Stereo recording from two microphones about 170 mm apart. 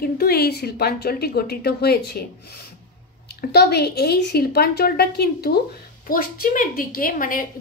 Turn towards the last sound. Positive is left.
turn(degrees=55)  # may be behind; listen again after turning